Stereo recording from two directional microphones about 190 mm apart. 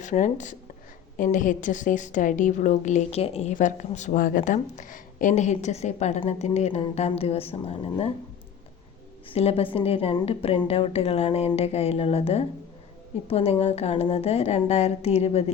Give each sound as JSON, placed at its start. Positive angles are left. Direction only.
{"t": 0.0, "sound": "a woman's voice", "side_deg": 40}
{"t": 9.3, "sound": "a woman's voice", "side_deg": 30}